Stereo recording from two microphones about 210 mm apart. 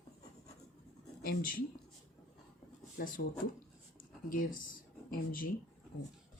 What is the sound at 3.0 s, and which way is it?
Speech, 45° left (ahead or behind).